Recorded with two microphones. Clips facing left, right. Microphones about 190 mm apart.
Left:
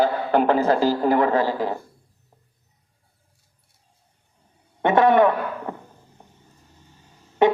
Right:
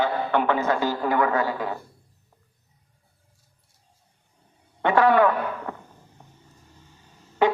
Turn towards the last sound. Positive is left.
turn(degrees=20)  # may be behind; listen again after turning